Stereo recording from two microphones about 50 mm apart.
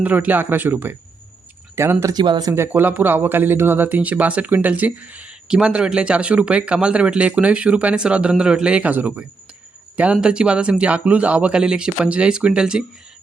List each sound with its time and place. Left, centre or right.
0.0 s speech: right
1.7 s speech: right
2.7 s speech: right
5.5 s speech: centre
8.9 s speech: right
10.0 s speech: right